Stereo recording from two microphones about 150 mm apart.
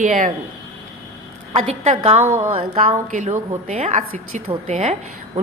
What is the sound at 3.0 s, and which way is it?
A woman's voice, 55° right (ahead or behind).